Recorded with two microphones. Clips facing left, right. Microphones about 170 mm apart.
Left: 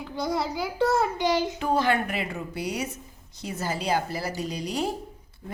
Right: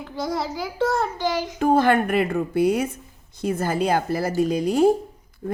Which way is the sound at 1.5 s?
50° right (ahead or behind).